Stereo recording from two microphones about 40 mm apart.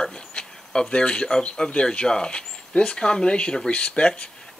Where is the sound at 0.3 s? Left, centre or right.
Left.